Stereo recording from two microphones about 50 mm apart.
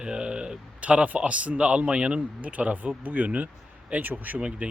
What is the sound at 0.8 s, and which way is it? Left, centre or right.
A man's voice, right.